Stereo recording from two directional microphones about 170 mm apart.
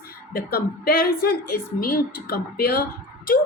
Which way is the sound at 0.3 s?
65° left (ahead or behind).